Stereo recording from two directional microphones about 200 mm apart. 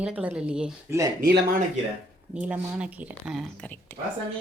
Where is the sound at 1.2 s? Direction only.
50° right (ahead or behind).